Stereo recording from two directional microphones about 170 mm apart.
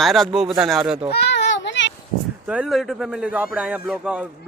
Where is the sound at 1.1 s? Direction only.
85° left.